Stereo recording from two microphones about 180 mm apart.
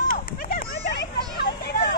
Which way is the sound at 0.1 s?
55° left (ahead or behind).